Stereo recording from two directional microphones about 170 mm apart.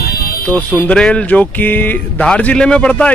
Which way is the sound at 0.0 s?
65° left (ahead or behind).